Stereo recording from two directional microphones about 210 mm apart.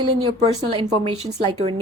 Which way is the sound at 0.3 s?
25° right (ahead or behind).